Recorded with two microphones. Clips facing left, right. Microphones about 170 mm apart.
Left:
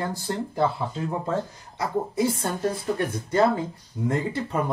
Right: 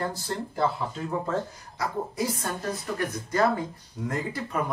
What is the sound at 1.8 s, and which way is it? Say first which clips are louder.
Speech: left 4 dB; 25° left (ahead or behind).